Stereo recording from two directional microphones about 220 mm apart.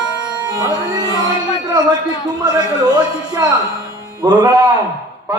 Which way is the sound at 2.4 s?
20° right (ahead or behind).